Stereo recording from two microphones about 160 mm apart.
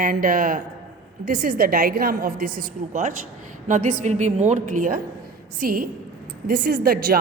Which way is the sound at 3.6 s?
55° right (ahead or behind).